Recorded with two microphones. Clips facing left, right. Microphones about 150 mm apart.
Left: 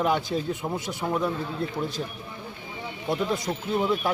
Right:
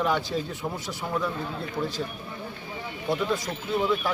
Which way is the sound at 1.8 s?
20° left (ahead or behind).